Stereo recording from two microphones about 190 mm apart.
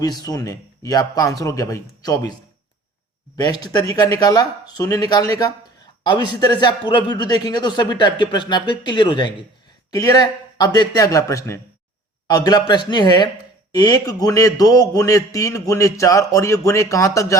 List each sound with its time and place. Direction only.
0.0 s speech: 20° left (ahead or behind)
3.3 s a man's voice: 20° left (ahead or behind)